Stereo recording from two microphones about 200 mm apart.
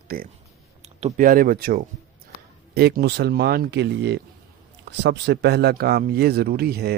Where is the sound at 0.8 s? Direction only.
40° right (ahead or behind).